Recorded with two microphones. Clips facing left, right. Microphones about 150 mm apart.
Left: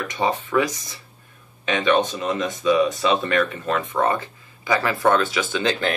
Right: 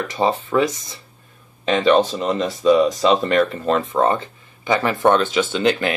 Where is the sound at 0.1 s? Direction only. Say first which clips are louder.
Right 2 dB; 30° right (ahead or behind).